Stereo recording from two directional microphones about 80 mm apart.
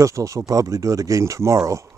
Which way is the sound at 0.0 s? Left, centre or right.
Right.